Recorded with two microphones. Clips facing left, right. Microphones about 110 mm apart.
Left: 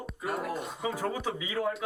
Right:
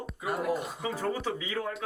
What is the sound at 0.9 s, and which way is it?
Speech, 10° left (ahead or behind).